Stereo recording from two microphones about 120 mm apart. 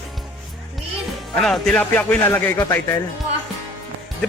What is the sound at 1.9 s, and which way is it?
A man's voice, 15° left (ahead or behind).